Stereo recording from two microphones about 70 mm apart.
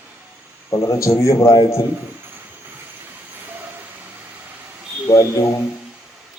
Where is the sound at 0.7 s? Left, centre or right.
Left.